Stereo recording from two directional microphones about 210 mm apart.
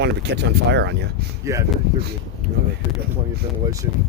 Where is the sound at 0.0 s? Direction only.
55° right (ahead or behind).